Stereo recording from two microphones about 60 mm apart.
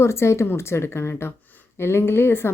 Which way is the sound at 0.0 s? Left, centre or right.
Left.